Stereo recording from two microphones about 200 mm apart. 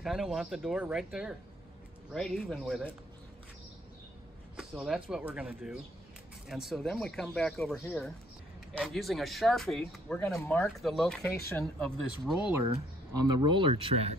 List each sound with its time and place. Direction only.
0.0 s speech: centre (ahead or behind)
4.6 s speech: centre (ahead or behind)
10.8 s speech: centre (ahead or behind)
13.1 s speech: 20° right (ahead or behind)